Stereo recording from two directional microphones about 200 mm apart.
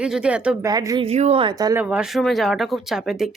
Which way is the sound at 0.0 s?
5° right (ahead or behind).